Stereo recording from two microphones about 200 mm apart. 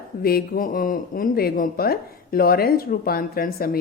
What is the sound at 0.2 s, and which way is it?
Speech, 50° left (ahead or behind).